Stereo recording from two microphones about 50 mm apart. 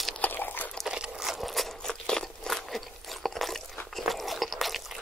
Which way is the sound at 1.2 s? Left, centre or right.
Centre.